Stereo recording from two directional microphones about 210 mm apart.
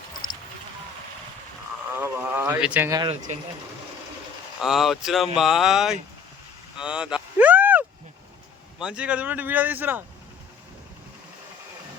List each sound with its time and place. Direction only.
0.1 s a sound: 40° left (ahead or behind)
1.9 s speech: 10° right (ahead or behind)
3.0 s speech: 20° right (ahead or behind)
4.6 s speech: centre (ahead or behind)
6.7 s vehicle: 5° right (ahead or behind)
8.8 s speech: 5° right (ahead or behind)